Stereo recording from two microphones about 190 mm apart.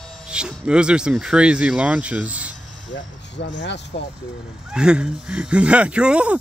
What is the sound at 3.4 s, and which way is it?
Speech, 65° left (ahead or behind).